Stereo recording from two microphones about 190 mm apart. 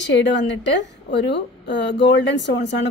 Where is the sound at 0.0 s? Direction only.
65° left (ahead or behind).